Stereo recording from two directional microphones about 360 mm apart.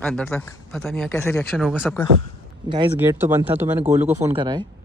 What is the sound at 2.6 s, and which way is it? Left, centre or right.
Speech, centre.